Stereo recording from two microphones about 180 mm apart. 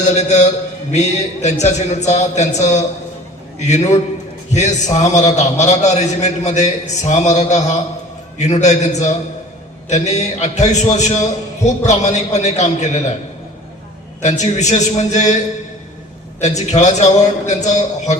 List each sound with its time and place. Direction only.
0.0 s a man's voice: 40° left (ahead or behind)
14.2 s a man's voice: 40° left (ahead or behind)
16.4 s a man's voice: 40° left (ahead or behind)